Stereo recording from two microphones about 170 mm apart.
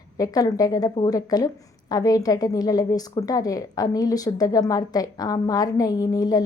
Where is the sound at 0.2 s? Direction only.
20° left (ahead or behind).